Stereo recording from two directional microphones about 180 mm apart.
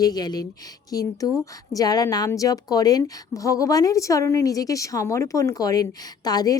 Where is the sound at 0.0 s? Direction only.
20° left (ahead or behind).